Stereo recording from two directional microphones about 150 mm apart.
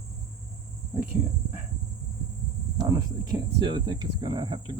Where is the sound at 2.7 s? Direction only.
25° right (ahead or behind).